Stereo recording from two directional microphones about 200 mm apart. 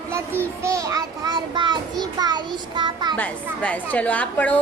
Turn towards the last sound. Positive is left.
turn(degrees=5)  # may be behind; listen again after turning